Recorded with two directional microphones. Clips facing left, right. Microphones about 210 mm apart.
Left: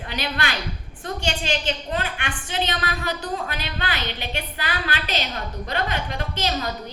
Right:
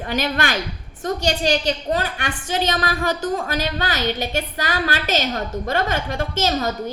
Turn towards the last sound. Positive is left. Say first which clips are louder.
# right 5 dB
turn(degrees=-45)  # may be behind; listen again after turning